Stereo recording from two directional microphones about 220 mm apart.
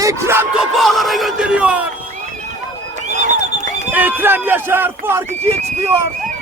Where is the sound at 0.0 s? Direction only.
10° right (ahead or behind).